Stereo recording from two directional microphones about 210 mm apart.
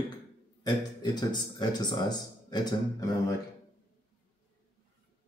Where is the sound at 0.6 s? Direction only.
20° left (ahead or behind).